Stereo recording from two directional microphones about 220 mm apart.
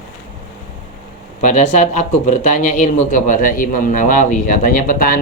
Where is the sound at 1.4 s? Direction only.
35° left (ahead or behind).